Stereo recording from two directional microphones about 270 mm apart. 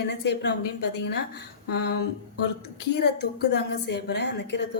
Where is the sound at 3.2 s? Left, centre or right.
Left.